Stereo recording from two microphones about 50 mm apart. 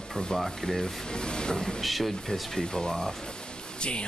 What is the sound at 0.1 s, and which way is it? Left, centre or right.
Speech, centre.